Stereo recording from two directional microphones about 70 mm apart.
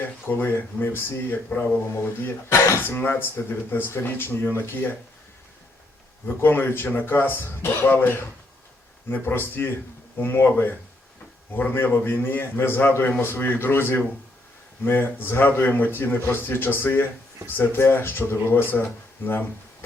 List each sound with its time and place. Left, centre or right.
0.0 s speech: left
1.5 s speech: centre
2.0 s a man's voice: left
6.2 s a man's voice: left
11.5 s a man's voice: left